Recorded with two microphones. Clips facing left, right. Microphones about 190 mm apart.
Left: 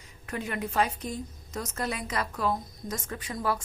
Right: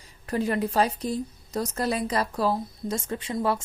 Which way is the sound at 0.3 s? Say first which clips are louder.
Right 7 dB; 35° right (ahead or behind).